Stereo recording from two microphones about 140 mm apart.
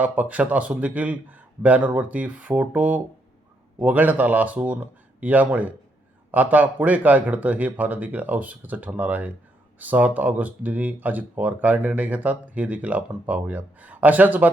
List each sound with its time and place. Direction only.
0.0 s speech: 10° right (ahead or behind)